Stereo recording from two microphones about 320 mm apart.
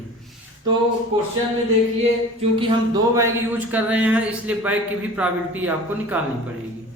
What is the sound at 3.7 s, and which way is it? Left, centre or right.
A man's voice, centre.